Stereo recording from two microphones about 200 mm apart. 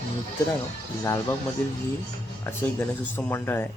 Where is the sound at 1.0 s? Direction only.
15° left (ahead or behind).